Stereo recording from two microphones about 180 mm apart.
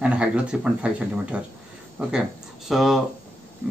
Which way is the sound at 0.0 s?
5° right (ahead or behind).